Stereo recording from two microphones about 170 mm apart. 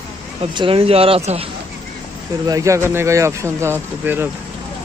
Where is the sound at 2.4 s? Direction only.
20° right (ahead or behind).